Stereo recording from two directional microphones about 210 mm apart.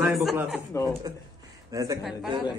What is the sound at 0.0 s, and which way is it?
Speech, centre (ahead or behind).